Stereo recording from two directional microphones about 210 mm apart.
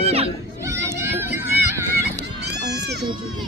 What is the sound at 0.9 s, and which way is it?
Crowd, 10° right (ahead or behind).